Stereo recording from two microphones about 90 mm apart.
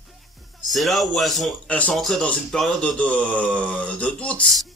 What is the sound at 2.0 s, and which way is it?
A man's voice, centre (ahead or behind).